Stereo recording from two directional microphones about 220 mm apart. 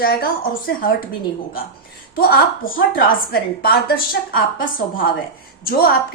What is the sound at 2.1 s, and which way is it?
A woman's voice, 45° left (ahead or behind).